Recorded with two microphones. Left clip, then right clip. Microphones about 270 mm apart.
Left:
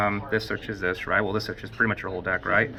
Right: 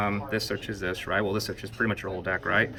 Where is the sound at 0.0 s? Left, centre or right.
Centre.